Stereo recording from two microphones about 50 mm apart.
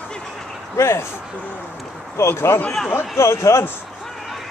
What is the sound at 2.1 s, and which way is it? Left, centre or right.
Speech, left.